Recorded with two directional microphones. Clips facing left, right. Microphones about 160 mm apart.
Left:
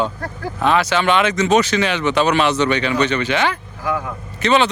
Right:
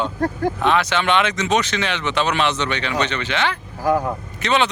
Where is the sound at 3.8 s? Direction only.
40° right (ahead or behind).